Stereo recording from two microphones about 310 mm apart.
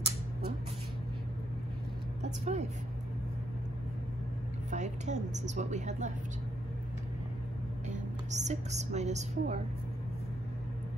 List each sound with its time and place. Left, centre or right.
2.2 s a woman's voice: right
4.6 s a woman's voice: right
7.9 s a woman's voice: right